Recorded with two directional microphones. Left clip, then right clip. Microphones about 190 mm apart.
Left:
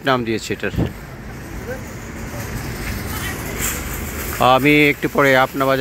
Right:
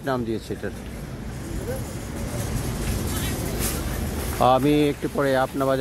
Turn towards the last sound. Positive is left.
turn(degrees=10)  # may be behind; listen again after turning